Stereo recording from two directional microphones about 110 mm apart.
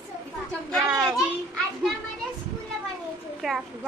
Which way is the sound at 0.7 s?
5° right (ahead or behind).